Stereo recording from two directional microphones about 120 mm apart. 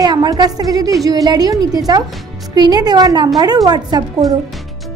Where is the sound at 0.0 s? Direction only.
35° right (ahead or behind).